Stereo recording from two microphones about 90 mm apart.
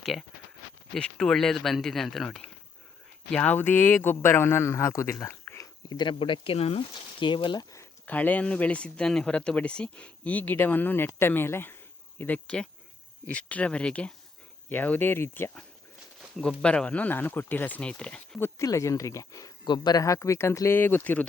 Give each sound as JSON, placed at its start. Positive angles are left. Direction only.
{"t": 0.0, "sound": "speech", "side_deg": 0}
{"t": 5.2, "sound": "a sound", "side_deg": 30}
{"t": 5.9, "sound": "speech", "side_deg": 60}
{"t": 7.2, "sound": "speech", "side_deg": 65}
{"t": 7.6, "sound": "a sound", "side_deg": 40}
{"t": 8.0, "sound": "speech", "side_deg": 15}
{"t": 12.2, "sound": "speech", "side_deg": 15}
{"t": 16.6, "sound": "speech", "side_deg": 10}
{"t": 18.6, "sound": "speech", "side_deg": 35}
{"t": 19.6, "sound": "speech", "side_deg": 55}